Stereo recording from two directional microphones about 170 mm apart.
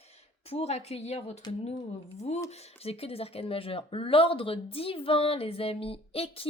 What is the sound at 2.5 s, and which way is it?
Speech, 40° left (ahead or behind).